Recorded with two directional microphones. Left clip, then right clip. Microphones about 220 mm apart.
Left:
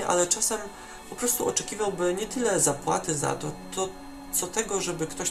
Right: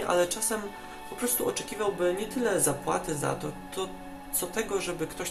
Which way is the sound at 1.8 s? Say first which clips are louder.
Right 1 dB; 10° left (ahead or behind).